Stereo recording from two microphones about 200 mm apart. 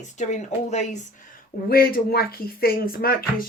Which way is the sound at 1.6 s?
50° left (ahead or behind).